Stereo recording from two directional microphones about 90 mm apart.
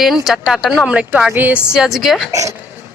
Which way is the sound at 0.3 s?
5° right (ahead or behind).